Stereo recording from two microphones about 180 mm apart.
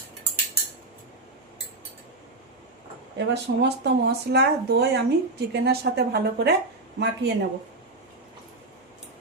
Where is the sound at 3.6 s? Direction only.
65° right (ahead or behind).